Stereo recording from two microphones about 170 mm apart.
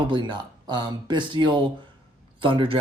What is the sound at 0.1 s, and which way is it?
Speech, 30° right (ahead or behind).